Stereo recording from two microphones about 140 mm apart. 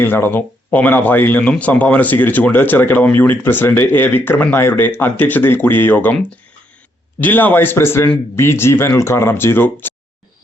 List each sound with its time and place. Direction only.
0.0 s speech: 15° left (ahead or behind)